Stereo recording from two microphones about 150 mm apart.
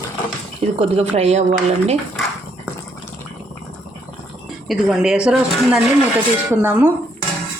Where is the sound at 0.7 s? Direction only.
40° right (ahead or behind).